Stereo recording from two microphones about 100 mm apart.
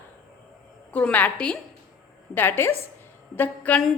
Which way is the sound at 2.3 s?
20° left (ahead or behind).